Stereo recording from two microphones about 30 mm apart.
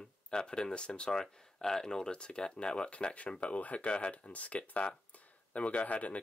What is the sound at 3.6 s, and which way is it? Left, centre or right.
Speech, left.